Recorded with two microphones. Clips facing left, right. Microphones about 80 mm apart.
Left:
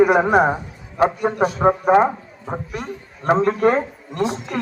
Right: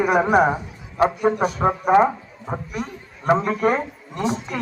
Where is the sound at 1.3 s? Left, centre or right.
Centre.